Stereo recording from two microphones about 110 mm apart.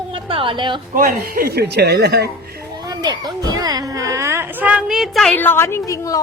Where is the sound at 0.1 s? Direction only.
55° right (ahead or behind).